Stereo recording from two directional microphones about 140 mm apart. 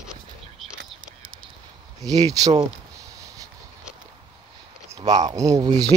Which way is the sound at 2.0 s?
25° right (ahead or behind).